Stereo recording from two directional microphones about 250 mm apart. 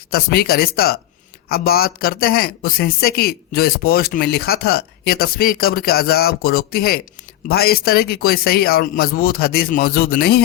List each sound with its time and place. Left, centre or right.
0.1 s speech: left